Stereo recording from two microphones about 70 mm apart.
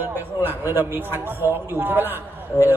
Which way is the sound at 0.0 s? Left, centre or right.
Right.